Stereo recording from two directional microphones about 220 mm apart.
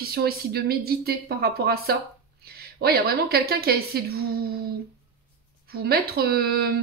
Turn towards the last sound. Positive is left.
turn(degrees=-45)  # may be behind; listen again after turning